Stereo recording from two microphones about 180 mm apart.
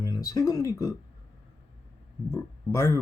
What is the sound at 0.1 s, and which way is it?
Speech, 20° left (ahead or behind).